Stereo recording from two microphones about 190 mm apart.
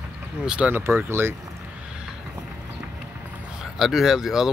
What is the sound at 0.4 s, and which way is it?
Speech, 5° right (ahead or behind).